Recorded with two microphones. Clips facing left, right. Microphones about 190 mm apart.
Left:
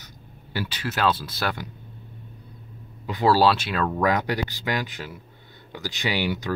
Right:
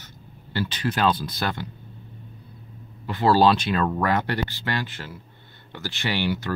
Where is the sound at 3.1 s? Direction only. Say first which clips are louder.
Even; 15° left (ahead or behind).